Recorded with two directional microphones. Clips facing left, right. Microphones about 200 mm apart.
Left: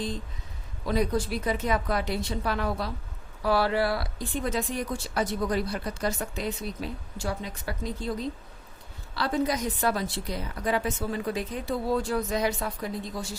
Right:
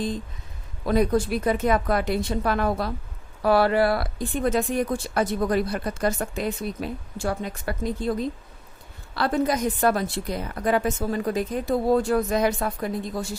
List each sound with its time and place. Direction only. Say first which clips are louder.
0.9 s speech: right 5 dB; 50° right (ahead or behind)